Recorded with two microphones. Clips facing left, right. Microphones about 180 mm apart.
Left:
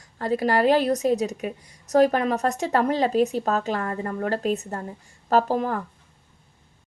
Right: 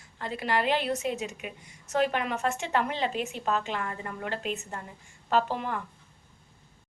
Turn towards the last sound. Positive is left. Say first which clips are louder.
# left 6 dB
turn(degrees=40)  # may be behind; listen again after turning